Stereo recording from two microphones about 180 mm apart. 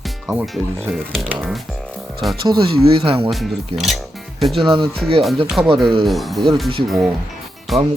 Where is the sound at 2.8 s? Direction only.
30° right (ahead or behind).